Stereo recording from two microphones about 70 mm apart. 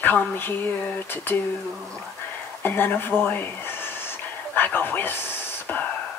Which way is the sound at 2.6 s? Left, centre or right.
Left.